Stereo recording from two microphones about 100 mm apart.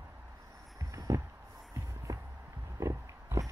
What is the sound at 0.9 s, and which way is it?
Heart sounds, 35° right (ahead or behind).